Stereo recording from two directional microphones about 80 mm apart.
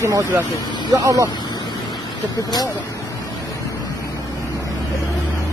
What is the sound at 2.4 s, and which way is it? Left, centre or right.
Speech, left.